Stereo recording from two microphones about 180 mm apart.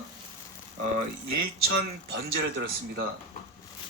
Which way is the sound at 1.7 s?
70° right (ahead or behind).